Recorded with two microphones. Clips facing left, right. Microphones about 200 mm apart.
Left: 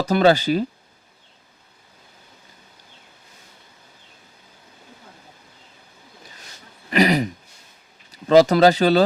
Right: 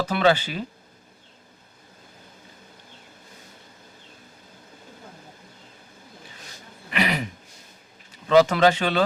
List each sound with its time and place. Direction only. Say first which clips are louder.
0.0 s speech: left 4 dB; 40° left (ahead or behind)
6.9 s throat clearing: left 8 dB; 40° left (ahead or behind)
8.1 s speech: left 4 dB; 40° left (ahead or behind)